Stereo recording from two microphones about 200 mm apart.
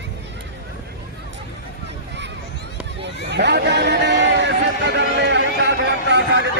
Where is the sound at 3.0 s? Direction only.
60° right (ahead or behind).